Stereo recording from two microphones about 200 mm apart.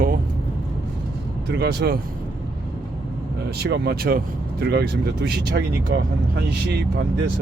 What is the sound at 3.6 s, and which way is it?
Speech, 55° right (ahead or behind).